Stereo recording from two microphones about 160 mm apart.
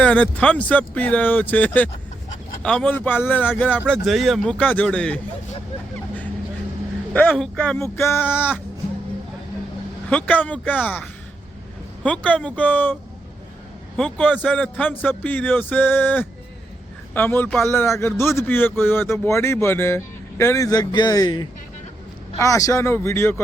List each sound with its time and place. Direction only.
0.0 s a man's voice: 10° left (ahead or behind)
7.1 s a man's voice: 5° left (ahead or behind)
7.8 s a man's voice: 15° left (ahead or behind)
10.1 s a man's voice: 10° left (ahead or behind)
13.9 s a man's voice: 5° left (ahead or behind)